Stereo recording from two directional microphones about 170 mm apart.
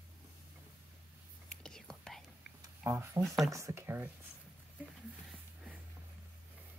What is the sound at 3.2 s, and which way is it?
Speech, centre (ahead or behind).